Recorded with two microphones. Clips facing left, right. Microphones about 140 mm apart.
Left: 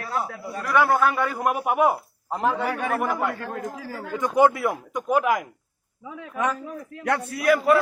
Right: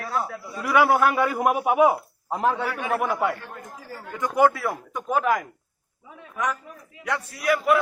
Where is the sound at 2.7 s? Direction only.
50° left (ahead or behind).